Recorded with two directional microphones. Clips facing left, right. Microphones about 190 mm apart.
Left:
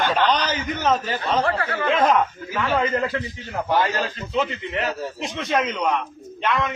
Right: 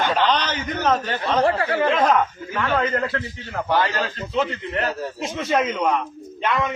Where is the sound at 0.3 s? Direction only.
10° left (ahead or behind).